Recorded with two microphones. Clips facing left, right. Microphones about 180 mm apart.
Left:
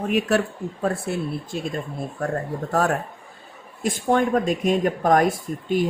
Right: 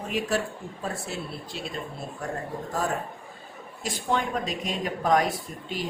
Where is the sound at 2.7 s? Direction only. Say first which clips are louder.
Left 7 dB; 70° left (ahead or behind).